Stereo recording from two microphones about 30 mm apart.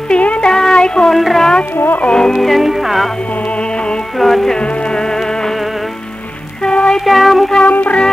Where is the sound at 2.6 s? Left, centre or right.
Centre.